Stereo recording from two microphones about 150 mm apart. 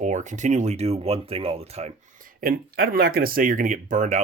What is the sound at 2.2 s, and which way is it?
Speech, 75° right (ahead or behind).